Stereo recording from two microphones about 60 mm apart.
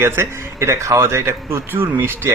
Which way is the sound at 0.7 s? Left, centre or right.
Right.